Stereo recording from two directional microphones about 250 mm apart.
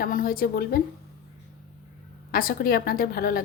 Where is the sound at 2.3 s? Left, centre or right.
Left.